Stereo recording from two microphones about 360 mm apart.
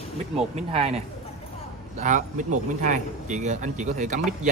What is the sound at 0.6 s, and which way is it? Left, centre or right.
A man's voice, centre.